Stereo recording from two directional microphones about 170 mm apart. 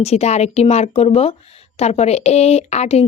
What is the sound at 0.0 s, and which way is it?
Speech, 40° left (ahead or behind).